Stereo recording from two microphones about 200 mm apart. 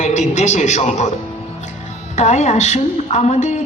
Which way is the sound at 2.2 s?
35° left (ahead or behind).